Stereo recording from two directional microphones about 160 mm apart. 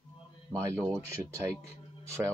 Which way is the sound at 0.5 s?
15° right (ahead or behind).